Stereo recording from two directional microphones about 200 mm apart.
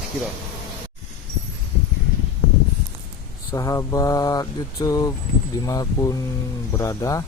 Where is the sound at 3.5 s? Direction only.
15° left (ahead or behind).